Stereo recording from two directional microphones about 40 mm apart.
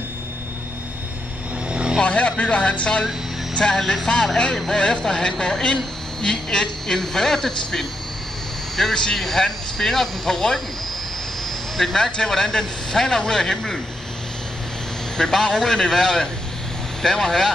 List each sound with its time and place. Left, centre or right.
1.7 s vehicle: right
2.0 s speech: left; by 7.8 s centre
8.9 s speech: centre
11.7 s speech: centre
15.1 s speech: centre